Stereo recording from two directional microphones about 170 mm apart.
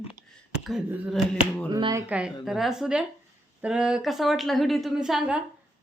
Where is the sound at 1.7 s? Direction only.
20° right (ahead or behind).